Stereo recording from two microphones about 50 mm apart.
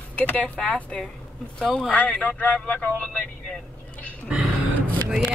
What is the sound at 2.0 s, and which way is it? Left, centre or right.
Speech, left.